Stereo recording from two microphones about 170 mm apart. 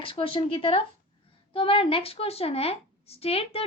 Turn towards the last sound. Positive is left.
turn(degrees=35)  # may be behind; listen again after turning